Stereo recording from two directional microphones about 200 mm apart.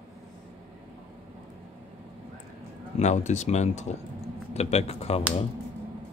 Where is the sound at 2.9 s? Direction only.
35° left (ahead or behind).